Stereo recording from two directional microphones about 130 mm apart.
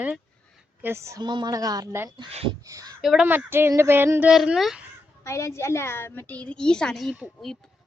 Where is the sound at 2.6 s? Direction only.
25° right (ahead or behind).